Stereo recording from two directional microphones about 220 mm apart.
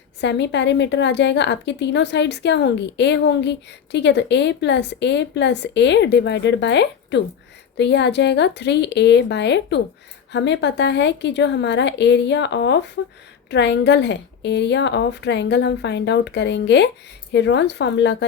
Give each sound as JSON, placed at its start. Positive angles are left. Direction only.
{"t": 0.2, "sound": "a woman's voice", "side_deg": 55}